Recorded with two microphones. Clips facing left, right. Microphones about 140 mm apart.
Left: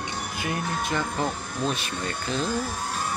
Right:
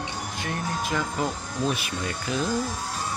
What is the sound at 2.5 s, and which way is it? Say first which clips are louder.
Speech: even; 60° left (ahead or behind).